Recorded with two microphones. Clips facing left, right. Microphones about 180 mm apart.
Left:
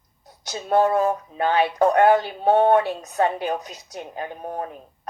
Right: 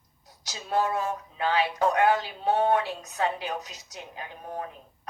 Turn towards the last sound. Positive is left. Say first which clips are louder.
# left 7 dB
turn(degrees=50)  # may be behind; listen again after turning